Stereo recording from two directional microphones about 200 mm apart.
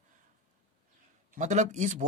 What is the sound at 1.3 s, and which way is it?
Speech, 35° right (ahead or behind).